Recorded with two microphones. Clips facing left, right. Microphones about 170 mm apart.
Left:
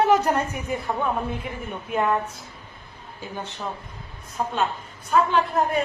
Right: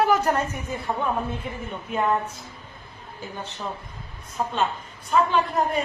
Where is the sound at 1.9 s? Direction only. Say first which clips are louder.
Left 1 dB; 5° left (ahead or behind).